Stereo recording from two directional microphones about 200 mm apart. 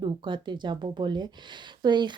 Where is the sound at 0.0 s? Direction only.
20° right (ahead or behind).